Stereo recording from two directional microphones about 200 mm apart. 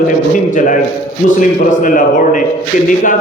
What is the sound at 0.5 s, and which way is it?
A man's voice, 40° left (ahead or behind).